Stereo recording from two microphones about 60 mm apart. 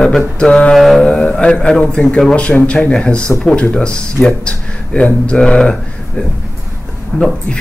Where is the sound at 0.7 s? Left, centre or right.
Centre.